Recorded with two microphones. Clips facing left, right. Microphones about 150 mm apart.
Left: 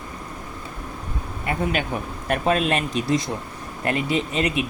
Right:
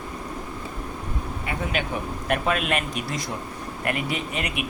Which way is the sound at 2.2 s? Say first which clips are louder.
Left 4 dB; 35° left (ahead or behind).